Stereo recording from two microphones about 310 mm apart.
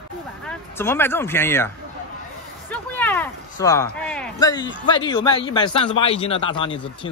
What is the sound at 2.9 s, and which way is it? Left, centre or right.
Speech, centre.